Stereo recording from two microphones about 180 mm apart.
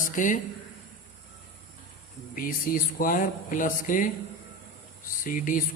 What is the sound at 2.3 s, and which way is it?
Speech, 50° left (ahead or behind).